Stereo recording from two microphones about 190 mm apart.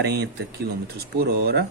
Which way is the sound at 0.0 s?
60° right (ahead or behind).